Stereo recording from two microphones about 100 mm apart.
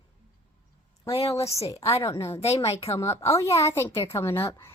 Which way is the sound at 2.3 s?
90° left.